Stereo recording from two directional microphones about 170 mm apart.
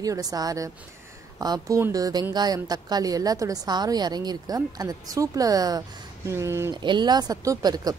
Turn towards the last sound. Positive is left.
turn(degrees=-25)  # may be behind; listen again after turning